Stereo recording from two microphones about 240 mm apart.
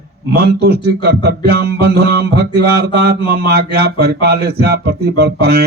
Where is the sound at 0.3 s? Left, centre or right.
Right.